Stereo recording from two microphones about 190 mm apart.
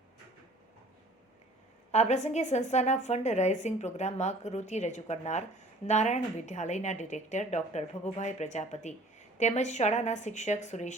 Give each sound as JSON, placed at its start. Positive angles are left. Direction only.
{"t": 1.9, "sound": "a woman's voice", "side_deg": 35}